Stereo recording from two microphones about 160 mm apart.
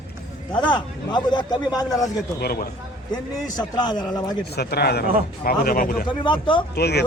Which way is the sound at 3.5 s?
25° left (ahead or behind).